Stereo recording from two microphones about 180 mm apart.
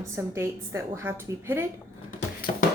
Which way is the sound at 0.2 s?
15° right (ahead or behind).